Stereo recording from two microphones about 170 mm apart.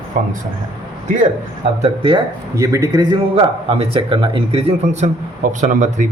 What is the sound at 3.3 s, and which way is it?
A man's voice, 35° right (ahead or behind).